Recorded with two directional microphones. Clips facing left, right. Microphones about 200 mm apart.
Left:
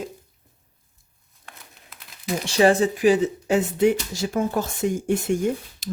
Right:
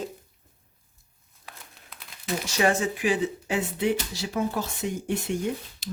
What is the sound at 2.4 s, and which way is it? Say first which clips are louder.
Speech: left 7 dB; 30° left (ahead or behind).